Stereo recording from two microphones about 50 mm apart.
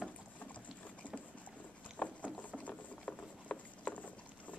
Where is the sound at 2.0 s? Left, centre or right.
Left.